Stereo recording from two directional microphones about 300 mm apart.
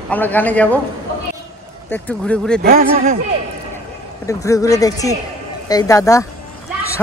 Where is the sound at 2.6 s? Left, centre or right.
Right.